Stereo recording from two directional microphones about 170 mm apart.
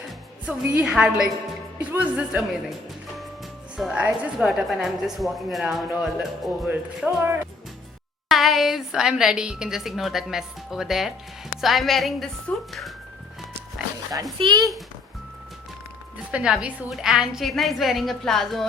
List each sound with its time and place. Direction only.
0.4 s a woman's voice: 10° right (ahead or behind)
3.8 s a woman's voice: 5° right (ahead or behind)
6.7 s speech: 10° right (ahead or behind)
8.3 s a woman's voice: centre (ahead or behind)
14.3 s a child's voice: 25° right (ahead or behind)
16.3 s a woman's voice: 5° right (ahead or behind)